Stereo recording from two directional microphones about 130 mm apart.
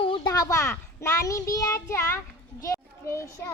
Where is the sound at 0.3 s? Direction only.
25° left (ahead or behind).